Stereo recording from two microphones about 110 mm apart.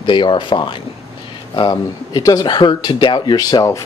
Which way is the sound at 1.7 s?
35° left (ahead or behind).